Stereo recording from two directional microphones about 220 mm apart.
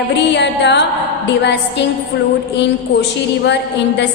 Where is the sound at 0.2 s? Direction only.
50° left (ahead or behind).